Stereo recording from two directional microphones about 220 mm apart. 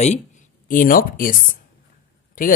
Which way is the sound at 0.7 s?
40° left (ahead or behind).